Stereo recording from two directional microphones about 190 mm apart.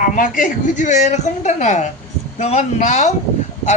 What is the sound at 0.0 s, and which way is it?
Speech, 45° left (ahead or behind).